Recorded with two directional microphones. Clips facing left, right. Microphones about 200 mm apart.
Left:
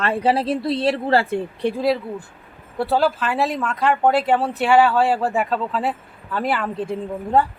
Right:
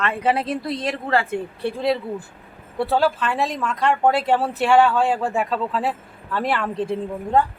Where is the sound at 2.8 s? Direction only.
Centre (ahead or behind).